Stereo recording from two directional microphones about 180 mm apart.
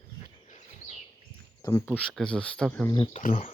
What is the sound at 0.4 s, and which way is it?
Bird, 40° left (ahead or behind).